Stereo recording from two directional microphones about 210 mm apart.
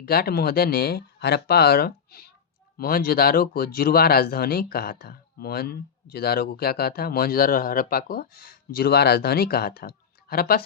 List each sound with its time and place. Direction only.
0.0 s speech: 45° left (ahead or behind)